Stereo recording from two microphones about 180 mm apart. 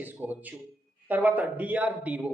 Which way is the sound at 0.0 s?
10° right (ahead or behind).